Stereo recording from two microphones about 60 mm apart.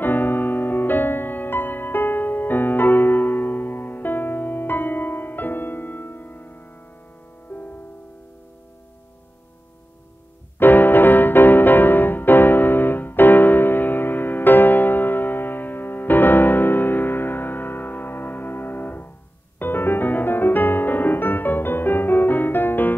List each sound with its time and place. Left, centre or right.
0.0 s music: left
10.6 s music: left